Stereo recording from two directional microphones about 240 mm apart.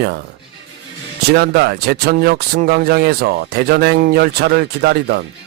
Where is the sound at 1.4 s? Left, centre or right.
Right.